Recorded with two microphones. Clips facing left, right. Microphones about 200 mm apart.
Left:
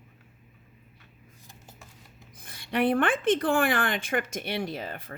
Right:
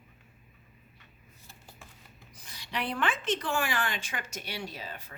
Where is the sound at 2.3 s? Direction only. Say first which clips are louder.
Left 9 dB; 50° left (ahead or behind).